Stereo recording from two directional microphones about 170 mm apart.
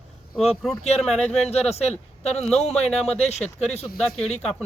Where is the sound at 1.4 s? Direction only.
40° left (ahead or behind).